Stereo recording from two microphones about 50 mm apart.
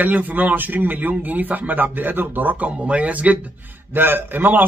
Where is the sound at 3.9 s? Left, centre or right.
Right.